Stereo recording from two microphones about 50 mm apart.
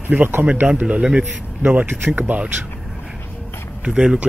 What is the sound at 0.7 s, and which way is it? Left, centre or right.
Speech, right.